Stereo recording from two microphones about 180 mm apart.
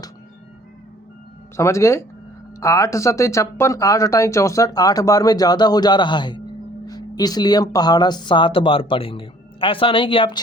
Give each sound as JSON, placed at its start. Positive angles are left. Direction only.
{"t": 1.5, "sound": "speech", "side_deg": 15}